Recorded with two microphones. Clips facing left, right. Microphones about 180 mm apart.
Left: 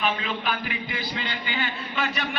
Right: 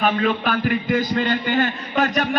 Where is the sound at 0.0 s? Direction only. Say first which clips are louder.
Right 8 dB; 50° right (ahead or behind).